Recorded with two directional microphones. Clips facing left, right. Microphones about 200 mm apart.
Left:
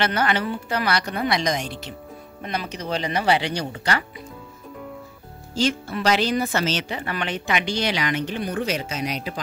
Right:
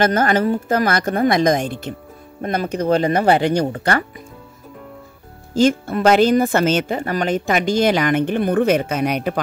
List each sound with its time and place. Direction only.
0.0 s speech: 45° right (ahead or behind)
5.5 s speech: 50° right (ahead or behind)